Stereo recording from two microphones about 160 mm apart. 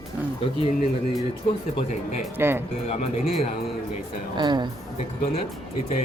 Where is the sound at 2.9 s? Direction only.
40° left (ahead or behind).